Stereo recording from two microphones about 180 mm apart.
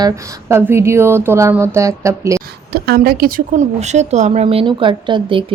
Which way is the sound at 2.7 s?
60° right (ahead or behind).